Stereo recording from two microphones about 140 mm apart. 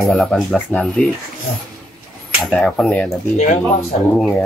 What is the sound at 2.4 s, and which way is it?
Speech, 5° left (ahead or behind).